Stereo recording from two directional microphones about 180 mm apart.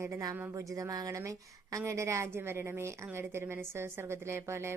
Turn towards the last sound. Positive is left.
turn(degrees=-15)  # may be behind; listen again after turning